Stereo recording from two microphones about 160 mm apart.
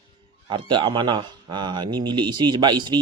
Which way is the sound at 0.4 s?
30° right (ahead or behind).